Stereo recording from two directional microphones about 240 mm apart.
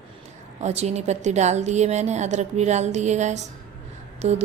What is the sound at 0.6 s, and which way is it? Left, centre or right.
Speech, right.